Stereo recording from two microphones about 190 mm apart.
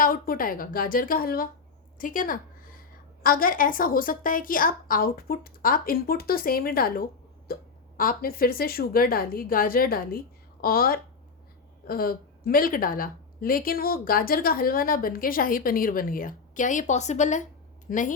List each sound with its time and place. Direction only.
0.0 s a woman's voice: 50° left (ahead or behind)